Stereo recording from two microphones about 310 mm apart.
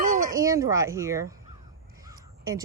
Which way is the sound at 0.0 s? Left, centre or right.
Right.